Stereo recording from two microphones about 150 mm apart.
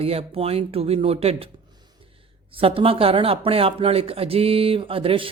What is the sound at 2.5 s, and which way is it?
Speech, 40° right (ahead or behind).